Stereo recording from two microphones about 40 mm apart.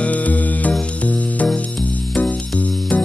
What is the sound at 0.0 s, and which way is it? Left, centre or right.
Music, left.